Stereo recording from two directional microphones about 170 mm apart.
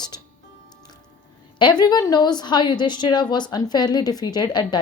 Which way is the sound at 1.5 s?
25° left (ahead or behind).